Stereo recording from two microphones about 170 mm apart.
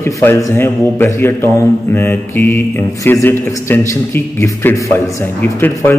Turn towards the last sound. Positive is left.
turn(degrees=10)  # may be behind; listen again after turning